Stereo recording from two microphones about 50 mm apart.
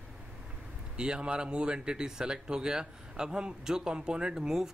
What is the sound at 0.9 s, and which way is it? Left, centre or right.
Speech, centre.